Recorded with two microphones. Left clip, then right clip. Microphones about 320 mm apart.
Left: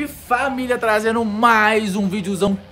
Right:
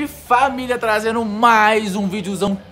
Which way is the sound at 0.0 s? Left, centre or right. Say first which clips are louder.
Right 4 dB; centre.